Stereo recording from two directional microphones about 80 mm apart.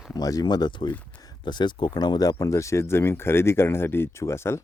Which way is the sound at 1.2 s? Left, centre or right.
Left.